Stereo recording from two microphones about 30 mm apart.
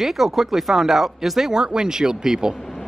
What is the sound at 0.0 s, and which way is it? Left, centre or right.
Speech, centre.